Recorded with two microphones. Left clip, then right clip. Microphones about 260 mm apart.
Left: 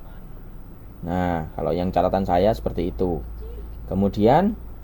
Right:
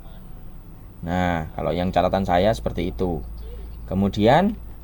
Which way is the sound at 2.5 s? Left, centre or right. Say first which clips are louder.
Even; right.